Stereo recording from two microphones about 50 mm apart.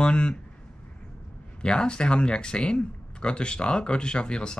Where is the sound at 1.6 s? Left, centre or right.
Centre.